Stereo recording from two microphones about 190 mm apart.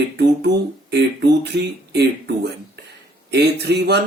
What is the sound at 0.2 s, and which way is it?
Speech, 65° right (ahead or behind).